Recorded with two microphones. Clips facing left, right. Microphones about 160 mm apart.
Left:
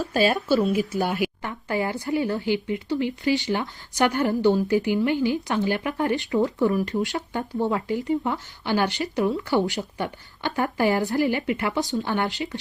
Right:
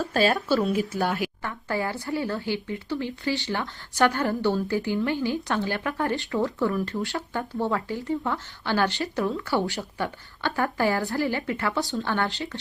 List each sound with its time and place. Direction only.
0.3 s a woman's voice: 15° left (ahead or behind)